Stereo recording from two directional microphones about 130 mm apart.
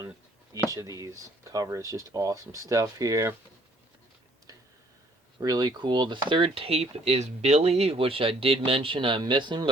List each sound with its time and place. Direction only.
0.7 s speech: 25° right (ahead or behind)
5.4 s speech: 30° right (ahead or behind)